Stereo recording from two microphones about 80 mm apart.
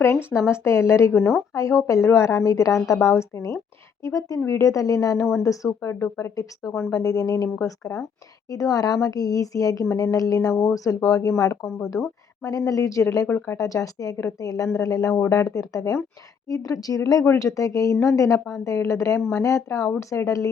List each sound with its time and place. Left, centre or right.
0.0 s a woman's voice: left
13.2 s speech: left
13.6 s a woman's voice: left